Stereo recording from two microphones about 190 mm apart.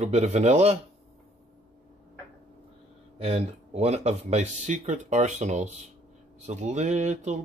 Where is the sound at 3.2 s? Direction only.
35° right (ahead or behind).